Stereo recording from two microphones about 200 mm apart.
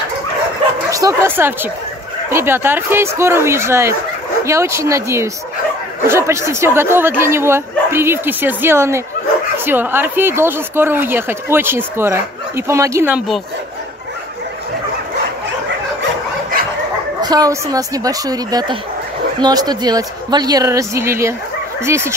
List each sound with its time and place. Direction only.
0.8 s speech: 15° right (ahead or behind)
17.2 s a woman's voice: 20° right (ahead or behind)